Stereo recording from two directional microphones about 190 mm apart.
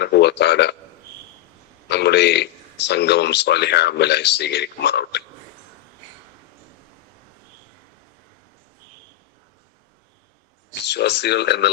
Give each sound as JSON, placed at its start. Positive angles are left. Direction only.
{"t": 0.0, "sound": "a man's voice", "side_deg": 60}
{"t": 1.9, "sound": "a man's voice", "side_deg": 60}
{"t": 10.8, "sound": "a man's voice", "side_deg": 65}